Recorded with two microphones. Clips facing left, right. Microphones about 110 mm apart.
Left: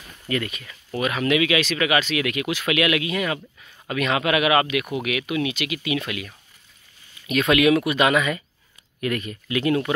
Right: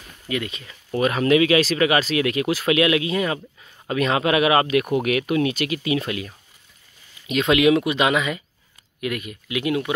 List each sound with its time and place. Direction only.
0.5 s speech: 25° right (ahead or behind)